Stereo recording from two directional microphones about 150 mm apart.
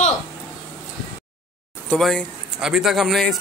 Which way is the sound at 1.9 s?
5° left (ahead or behind).